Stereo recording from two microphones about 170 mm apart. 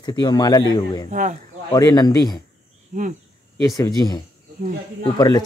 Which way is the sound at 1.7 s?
25° left (ahead or behind).